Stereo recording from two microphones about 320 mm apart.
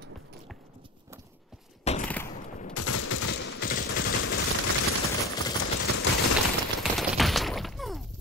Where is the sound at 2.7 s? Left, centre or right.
Left.